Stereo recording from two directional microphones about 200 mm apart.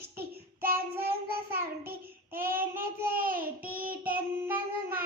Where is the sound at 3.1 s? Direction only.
45° right (ahead or behind).